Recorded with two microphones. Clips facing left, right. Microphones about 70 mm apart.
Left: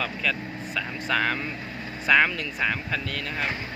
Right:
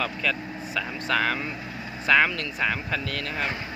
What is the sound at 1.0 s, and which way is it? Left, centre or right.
Speech, centre.